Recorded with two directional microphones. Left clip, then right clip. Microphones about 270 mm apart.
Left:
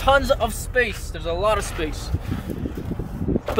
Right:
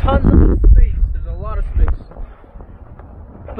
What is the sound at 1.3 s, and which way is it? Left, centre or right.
Speech, left.